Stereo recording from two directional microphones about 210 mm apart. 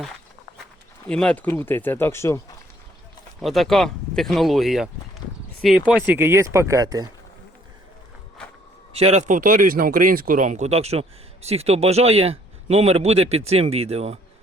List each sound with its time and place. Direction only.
1.0 s speech: 5° left (ahead or behind)
3.4 s speech: centre (ahead or behind); by 7.1 s 20° right (ahead or behind)
8.9 s speech: 30° right (ahead or behind)